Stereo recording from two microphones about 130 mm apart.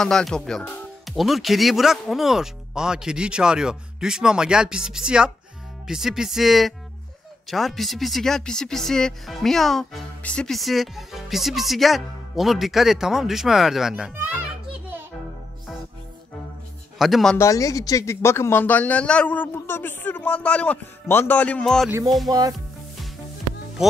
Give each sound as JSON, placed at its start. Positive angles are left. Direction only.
{"t": 0.0, "sound": "speech", "side_deg": 5}
{"t": 17.0, "sound": "speech", "side_deg": 0}
{"t": 17.4, "sound": "speech", "side_deg": 25}
{"t": 22.3, "sound": "speech", "side_deg": -35}